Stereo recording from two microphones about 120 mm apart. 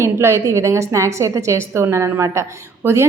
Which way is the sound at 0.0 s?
25° right (ahead or behind).